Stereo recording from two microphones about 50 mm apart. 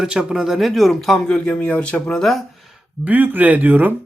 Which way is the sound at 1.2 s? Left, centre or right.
Centre.